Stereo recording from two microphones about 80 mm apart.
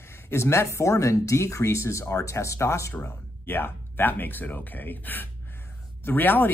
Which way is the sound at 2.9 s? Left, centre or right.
Left.